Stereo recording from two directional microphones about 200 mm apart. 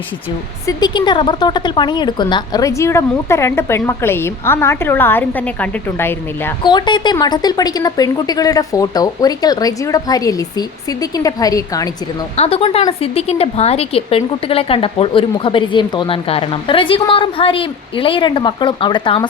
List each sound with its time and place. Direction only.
0.7 s speech: 20° left (ahead or behind)
6.6 s a woman's voice: 20° left (ahead or behind)
12.4 s a woman's voice: 30° left (ahead or behind)